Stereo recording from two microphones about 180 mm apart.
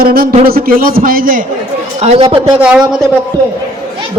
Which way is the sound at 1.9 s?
35° right (ahead or behind).